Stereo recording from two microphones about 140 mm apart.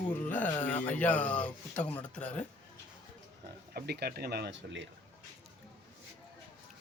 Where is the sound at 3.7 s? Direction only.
90° right.